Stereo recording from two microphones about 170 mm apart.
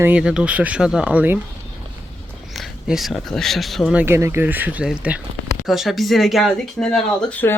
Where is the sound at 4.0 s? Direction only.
15° right (ahead or behind); by 7.5 s 5° left (ahead or behind).